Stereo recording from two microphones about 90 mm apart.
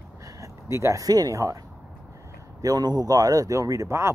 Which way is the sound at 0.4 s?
35° right (ahead or behind).